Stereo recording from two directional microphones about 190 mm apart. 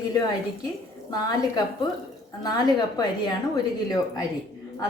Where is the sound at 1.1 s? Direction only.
20° left (ahead or behind).